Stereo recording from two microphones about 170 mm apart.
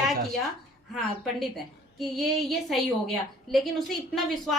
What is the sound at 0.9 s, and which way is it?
A woman's voice, centre (ahead or behind).